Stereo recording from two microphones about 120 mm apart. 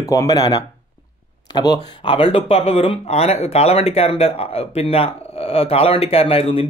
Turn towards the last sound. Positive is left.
turn(degrees=50)  # may be behind; listen again after turning